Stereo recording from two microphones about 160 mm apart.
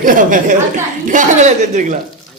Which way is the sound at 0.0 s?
55° right (ahead or behind).